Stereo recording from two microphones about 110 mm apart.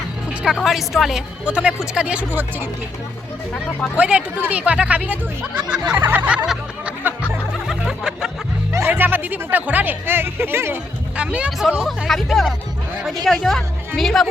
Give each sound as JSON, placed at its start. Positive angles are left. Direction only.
{"t": 0.4, "sound": "a woman's voice", "side_deg": -5}
{"t": 3.9, "sound": "a woman's voice", "side_deg": -10}
{"t": 6.1, "sound": "music", "side_deg": -15}
{"t": 8.9, "sound": "speech", "side_deg": -20}
{"t": 11.2, "sound": "a woman's voice", "side_deg": -10}
{"t": 11.9, "sound": "a woman's voice", "side_deg": 0}